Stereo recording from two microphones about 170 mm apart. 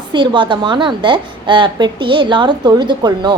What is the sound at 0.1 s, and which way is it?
A woman's voice, 25° right (ahead or behind).